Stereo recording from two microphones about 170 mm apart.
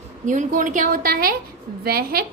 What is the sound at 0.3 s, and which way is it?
A woman's voice, 50° right (ahead or behind).